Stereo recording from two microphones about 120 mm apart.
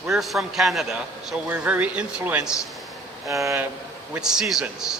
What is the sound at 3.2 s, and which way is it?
Speech, 25° right (ahead or behind).